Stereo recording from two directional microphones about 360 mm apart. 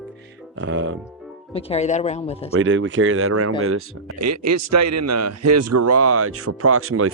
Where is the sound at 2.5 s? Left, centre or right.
Right.